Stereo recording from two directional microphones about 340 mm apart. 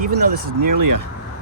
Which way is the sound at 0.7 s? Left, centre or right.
Right.